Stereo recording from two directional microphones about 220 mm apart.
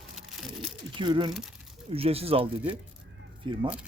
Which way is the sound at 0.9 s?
20° right (ahead or behind).